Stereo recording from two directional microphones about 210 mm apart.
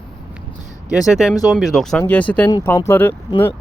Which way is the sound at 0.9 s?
5° right (ahead or behind).